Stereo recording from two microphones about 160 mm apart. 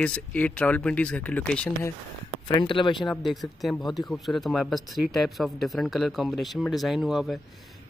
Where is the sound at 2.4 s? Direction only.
30° left (ahead or behind).